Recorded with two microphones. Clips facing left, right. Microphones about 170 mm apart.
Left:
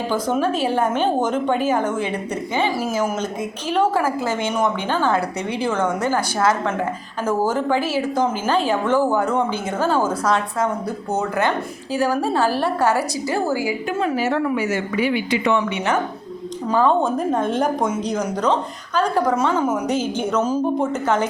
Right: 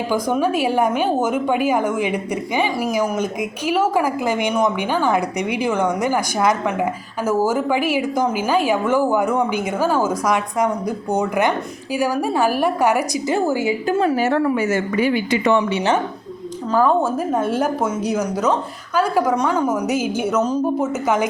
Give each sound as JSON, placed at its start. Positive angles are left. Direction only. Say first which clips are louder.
{"t": 0.1, "sound": "a woman's voice", "louder": "right 2 dB", "side_deg": -15}
{"t": 13.8, "sound": "a woman's voice", "louder": "right 4 dB", "side_deg": -35}
{"t": 14.3, "sound": "a woman's voice", "louder": "right 2 dB", "side_deg": -50}
{"t": 16.7, "sound": "a woman's voice", "louder": "right 1 dB", "side_deg": -5}
{"t": 20.4, "sound": "speech", "louder": "left 1 dB", "side_deg": 5}
{"t": 20.8, "sound": "a woman's voice", "louder": "right 1 dB", "side_deg": -10}